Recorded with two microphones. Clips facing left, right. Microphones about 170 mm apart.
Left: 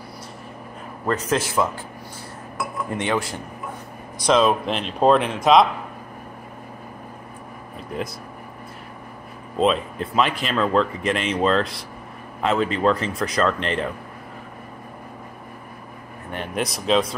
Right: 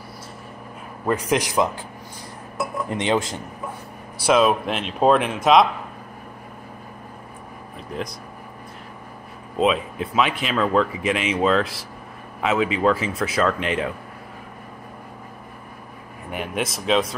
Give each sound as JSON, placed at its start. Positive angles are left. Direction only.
{"t": 1.0, "sound": "a man's voice", "side_deg": -10}
{"t": 4.2, "sound": "speech", "side_deg": -5}
{"t": 9.6, "sound": "speech", "side_deg": 0}
{"t": 16.3, "sound": "speech", "side_deg": -5}